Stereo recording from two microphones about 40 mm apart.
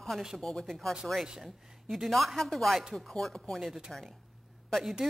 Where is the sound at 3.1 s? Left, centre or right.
Centre.